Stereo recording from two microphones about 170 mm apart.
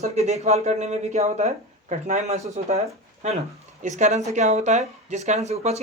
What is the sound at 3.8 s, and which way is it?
Speech, 45° right (ahead or behind).